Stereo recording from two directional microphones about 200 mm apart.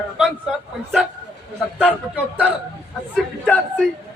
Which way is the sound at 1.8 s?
5° left (ahead or behind).